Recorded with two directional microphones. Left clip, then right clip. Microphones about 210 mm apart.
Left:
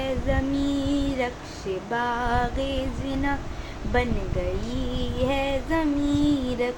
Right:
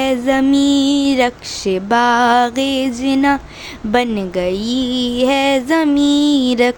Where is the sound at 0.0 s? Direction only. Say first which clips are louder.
Right 12 dB; 55° right (ahead or behind).